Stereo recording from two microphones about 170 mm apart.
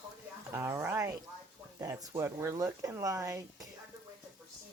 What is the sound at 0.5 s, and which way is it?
Speech, 15° right (ahead or behind).